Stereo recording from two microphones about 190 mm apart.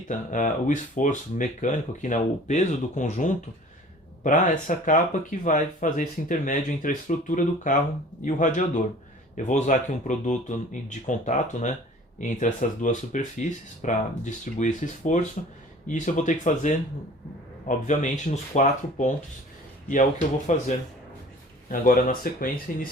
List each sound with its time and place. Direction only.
0.1 s speech: 40° left (ahead or behind)
20.5 s speech: 40° left (ahead or behind)
21.7 s speech: 45° left (ahead or behind)